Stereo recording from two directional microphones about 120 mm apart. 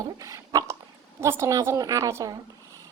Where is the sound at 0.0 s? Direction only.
30° right (ahead or behind).